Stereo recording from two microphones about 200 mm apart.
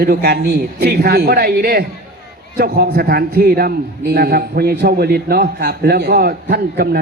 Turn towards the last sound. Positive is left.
turn(degrees=-50)  # may be behind; listen again after turning